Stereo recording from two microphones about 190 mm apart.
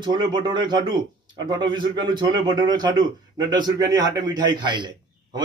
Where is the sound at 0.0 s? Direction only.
25° right (ahead or behind).